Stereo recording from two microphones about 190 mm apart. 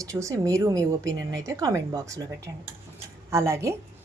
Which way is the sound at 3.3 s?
15° right (ahead or behind).